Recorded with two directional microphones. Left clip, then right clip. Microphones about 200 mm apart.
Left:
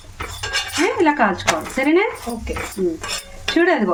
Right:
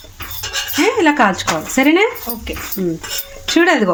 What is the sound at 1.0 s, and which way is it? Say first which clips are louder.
A woman's voice: right 3 dB; 45° right (ahead or behind).